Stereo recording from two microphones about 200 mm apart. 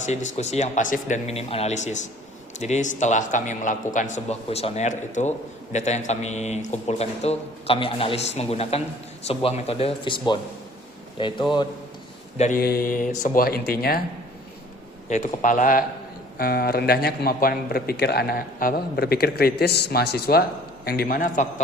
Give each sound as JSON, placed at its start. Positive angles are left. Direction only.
{"t": 0.0, "sound": "a man's voice", "side_deg": 35}
{"t": 12.4, "sound": "a man's voice", "side_deg": 40}
{"t": 15.1, "sound": "a man's voice", "side_deg": 35}